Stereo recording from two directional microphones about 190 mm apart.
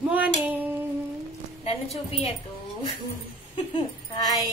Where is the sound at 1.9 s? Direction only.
30° left (ahead or behind).